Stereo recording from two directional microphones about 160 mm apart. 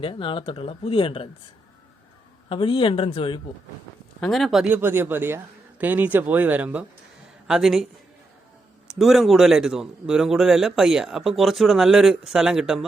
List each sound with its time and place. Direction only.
0.0 s speech: 35° left (ahead or behind)
2.5 s speech: 30° left (ahead or behind)
4.2 s speech: centre (ahead or behind)
8.9 s a man's voice: centre (ahead or behind)